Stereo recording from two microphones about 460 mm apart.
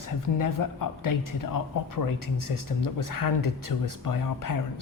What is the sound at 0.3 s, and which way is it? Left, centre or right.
Speech, left.